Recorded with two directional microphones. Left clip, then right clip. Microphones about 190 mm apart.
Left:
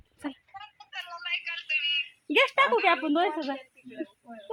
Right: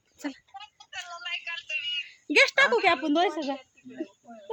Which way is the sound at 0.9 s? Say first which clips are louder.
Left 2 dB; 50° left (ahead or behind).